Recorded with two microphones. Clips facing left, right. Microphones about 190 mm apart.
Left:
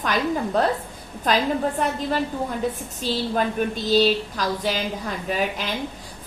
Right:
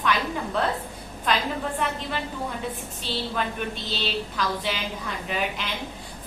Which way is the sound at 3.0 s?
40° left (ahead or behind).